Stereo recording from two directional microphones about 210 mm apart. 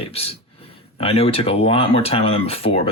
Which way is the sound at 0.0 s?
30° left (ahead or behind).